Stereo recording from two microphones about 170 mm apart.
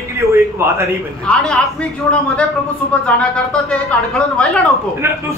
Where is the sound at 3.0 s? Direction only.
5° left (ahead or behind).